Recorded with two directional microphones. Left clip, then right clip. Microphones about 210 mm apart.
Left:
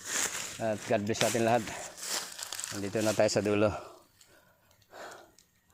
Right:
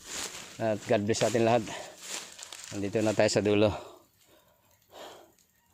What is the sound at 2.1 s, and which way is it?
Crumpling, 45° left (ahead or behind).